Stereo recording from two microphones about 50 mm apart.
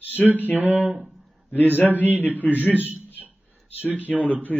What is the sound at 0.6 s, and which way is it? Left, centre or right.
A man's voice, right.